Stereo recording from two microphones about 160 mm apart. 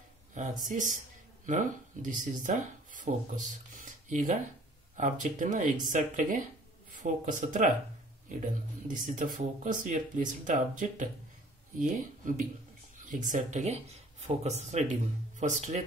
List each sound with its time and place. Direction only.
0.7 s speech: 55° right (ahead or behind)